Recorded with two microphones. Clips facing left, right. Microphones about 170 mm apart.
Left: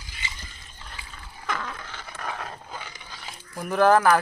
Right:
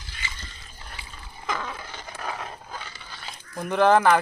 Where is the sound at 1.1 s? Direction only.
5° right (ahead or behind).